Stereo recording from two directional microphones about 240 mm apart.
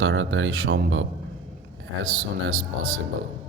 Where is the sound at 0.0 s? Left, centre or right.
Right.